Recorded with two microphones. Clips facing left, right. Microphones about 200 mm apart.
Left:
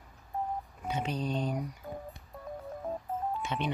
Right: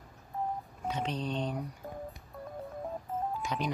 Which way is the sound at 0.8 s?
5° left (ahead or behind).